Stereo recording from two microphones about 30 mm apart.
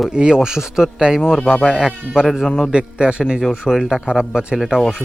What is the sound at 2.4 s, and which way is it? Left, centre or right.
Speech, centre.